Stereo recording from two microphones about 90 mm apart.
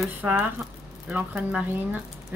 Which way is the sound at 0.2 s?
20° right (ahead or behind).